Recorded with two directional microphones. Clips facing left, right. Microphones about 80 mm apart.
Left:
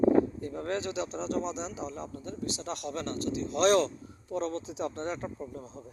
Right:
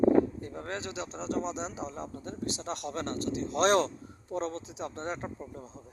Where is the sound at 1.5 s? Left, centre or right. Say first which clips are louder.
Even; right.